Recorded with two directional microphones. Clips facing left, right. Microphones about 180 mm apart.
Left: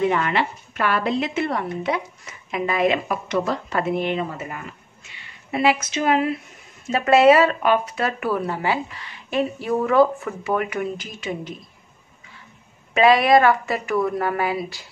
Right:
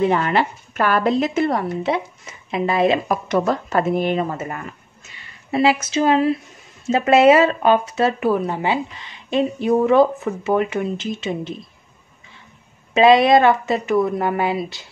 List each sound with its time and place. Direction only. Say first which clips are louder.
0.1 s speech: right 3 dB; 40° right (ahead or behind)
1.9 s speech: right 3 dB; 25° right (ahead or behind)
3.3 s speech: right 3 dB; 45° right (ahead or behind)
5.5 s speech: right 3 dB; 30° right (ahead or behind)
12.9 s speech: right 3 dB; 25° right (ahead or behind)